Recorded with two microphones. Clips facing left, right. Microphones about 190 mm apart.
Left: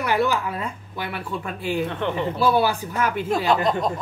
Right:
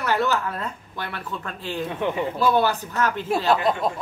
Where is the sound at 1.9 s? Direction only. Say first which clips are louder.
Even; 10° right (ahead or behind).